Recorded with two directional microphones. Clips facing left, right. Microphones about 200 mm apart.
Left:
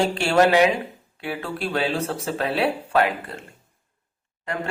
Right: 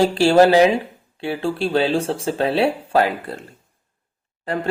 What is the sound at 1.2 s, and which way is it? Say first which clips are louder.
Speech: right 6 dB; 30° right (ahead or behind).